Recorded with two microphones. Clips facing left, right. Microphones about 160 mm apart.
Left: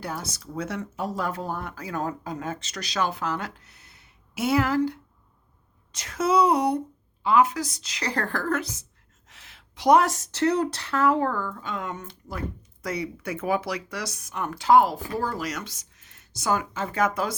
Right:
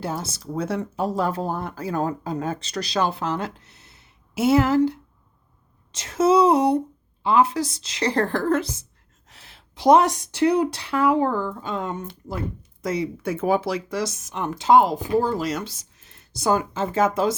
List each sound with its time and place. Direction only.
0.0 s speech: 25° right (ahead or behind)